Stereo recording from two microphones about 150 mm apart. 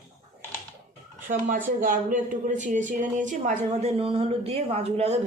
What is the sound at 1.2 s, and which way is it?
Speech, 60° right (ahead or behind).